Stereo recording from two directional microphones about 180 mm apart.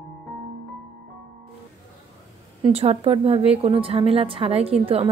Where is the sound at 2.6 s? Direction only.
35° right (ahead or behind).